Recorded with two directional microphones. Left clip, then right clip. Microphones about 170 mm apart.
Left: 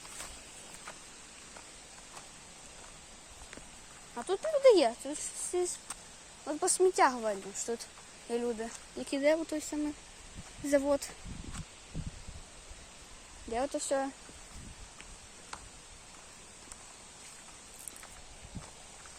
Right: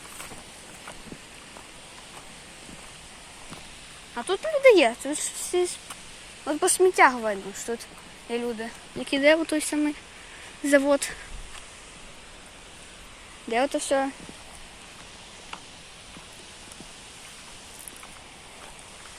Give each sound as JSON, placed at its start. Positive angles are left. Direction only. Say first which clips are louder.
{"t": 4.3, "sound": "speech", "louder": "right 6 dB", "side_deg": 15}
{"t": 4.9, "sound": "speech", "louder": "right 8 dB", "side_deg": 0}
{"t": 6.9, "sound": "speech", "louder": "right 8 dB", "side_deg": 20}
{"t": 8.3, "sound": "speech", "louder": "right 4 dB", "side_deg": 30}
{"t": 13.5, "sound": "speech", "louder": "right 9 dB", "side_deg": 0}